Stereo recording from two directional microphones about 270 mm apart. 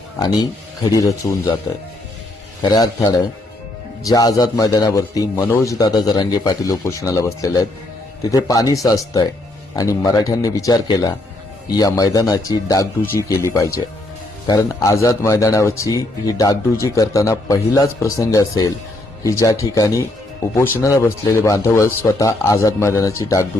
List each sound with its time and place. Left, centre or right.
0.2 s a man's voice: centre
2.6 s a man's voice: centre